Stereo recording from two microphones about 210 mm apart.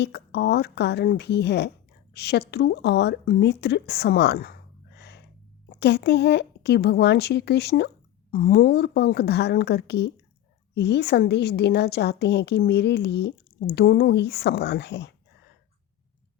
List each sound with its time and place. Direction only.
0.0 s a woman's voice: 55° left (ahead or behind)
4.9 s a sound: 55° left (ahead or behind)
5.6 s a woman's voice: 50° left (ahead or behind)